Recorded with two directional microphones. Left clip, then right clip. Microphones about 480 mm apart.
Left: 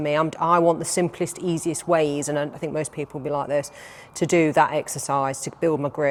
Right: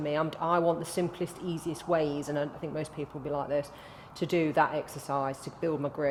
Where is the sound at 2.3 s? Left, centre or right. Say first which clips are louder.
Left 7 dB; left.